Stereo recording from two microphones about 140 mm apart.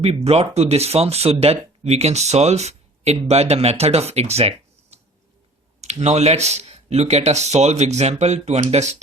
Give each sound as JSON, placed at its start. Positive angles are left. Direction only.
{"t": 0.0, "sound": "speech", "side_deg": -50}